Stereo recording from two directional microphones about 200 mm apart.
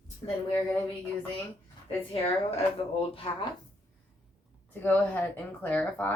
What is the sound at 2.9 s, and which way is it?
Speech, 25° left (ahead or behind).